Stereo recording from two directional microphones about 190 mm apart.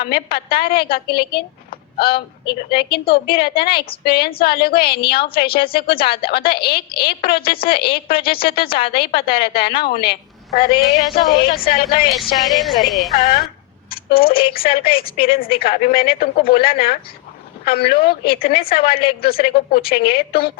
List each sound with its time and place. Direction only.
0.0 s a woman's voice: 55° left (ahead or behind)
12.5 s a woman's voice: centre (ahead or behind)
13.9 s a woman's voice: 55° left (ahead or behind)